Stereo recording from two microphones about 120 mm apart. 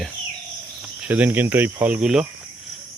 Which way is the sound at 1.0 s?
15° right (ahead or behind).